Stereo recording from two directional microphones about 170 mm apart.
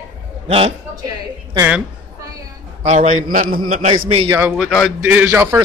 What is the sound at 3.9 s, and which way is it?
Speech, 30° right (ahead or behind).